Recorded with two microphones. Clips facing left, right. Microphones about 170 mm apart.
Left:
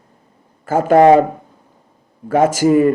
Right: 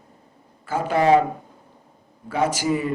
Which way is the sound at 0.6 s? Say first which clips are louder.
Left 10 dB; 45° left (ahead or behind).